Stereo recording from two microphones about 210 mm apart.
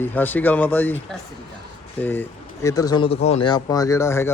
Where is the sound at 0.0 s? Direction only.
10° left (ahead or behind).